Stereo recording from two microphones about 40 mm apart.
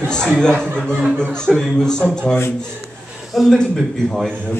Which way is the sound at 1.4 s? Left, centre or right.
Centre.